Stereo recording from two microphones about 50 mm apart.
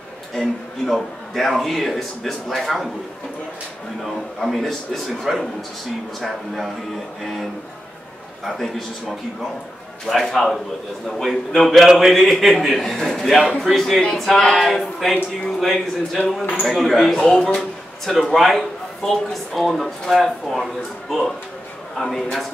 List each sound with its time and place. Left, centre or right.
0.8 s speech: centre
4.0 s speech: centre
8.5 s speech: centre
10.0 s speech: centre
14.1 s a sound: centre
14.7 s speech: centre
17.2 s speech: centre
17.6 s speech: centre